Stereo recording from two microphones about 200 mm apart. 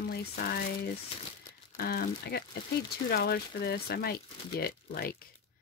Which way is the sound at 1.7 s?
50° left (ahead or behind).